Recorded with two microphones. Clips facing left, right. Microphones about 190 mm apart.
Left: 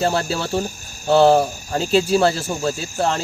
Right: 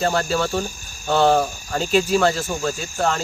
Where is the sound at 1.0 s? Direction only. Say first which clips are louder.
Left 4 dB; 30° left (ahead or behind).